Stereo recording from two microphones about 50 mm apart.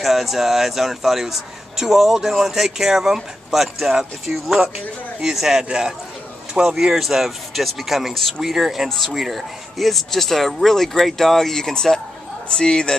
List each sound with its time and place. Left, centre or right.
0.0 s a man's voice: centre